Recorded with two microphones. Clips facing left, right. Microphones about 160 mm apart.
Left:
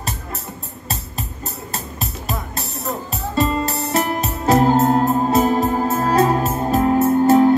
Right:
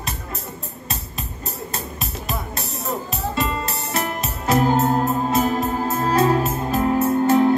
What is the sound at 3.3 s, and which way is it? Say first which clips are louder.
Music: left 8 dB; 35° left (ahead or behind).